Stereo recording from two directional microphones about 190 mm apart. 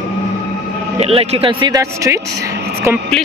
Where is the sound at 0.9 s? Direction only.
30° right (ahead or behind); by 2.1 s 15° right (ahead or behind).